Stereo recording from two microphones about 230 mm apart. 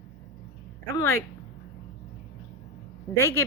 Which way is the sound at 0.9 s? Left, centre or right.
Centre.